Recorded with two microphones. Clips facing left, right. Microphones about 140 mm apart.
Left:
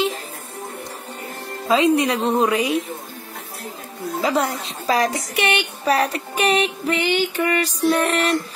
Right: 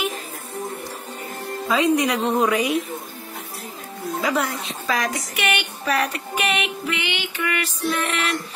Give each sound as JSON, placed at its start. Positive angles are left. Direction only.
{"t": 1.7, "sound": "speech", "side_deg": 25}
{"t": 4.2, "sound": "speech", "side_deg": 30}
{"t": 4.6, "sound": "child singing", "side_deg": 35}